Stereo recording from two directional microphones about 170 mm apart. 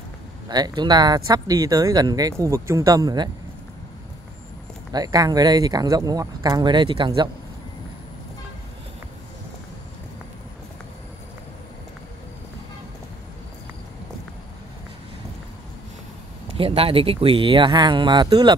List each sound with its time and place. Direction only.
0.5 s speech: 25° right (ahead or behind)
4.9 s speech: 20° right (ahead or behind)
16.5 s speech: 35° right (ahead or behind)